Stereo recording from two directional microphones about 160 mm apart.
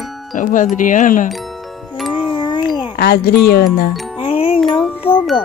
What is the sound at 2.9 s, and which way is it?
Speech, 70° left (ahead or behind).